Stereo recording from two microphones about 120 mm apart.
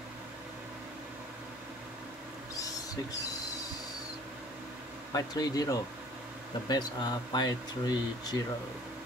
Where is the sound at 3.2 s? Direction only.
30° left (ahead or behind).